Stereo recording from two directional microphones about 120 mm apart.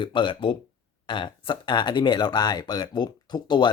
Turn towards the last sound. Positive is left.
turn(degrees=40)  # may be behind; listen again after turning